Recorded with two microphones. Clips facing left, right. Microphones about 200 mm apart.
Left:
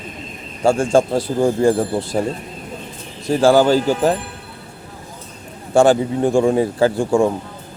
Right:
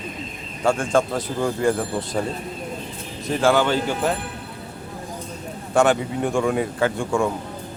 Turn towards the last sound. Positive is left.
turn(degrees=30)  # may be behind; listen again after turning